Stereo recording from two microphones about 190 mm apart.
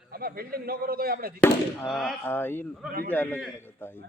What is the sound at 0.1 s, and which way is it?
A man's voice, 50° right (ahead or behind).